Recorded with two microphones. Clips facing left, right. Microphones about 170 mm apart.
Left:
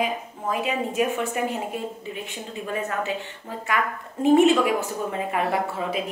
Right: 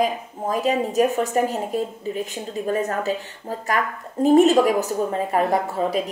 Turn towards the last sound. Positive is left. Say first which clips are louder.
# right 4 dB
turn(degrees=-40)  # may be behind; listen again after turning